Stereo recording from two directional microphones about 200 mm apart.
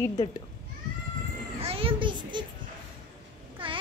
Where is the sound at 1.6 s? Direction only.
25° right (ahead or behind).